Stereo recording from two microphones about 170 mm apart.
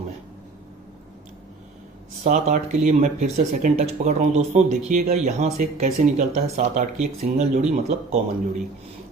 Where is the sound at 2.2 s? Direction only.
45° right (ahead or behind).